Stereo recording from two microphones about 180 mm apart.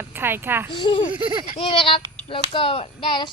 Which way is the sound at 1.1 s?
25° right (ahead or behind).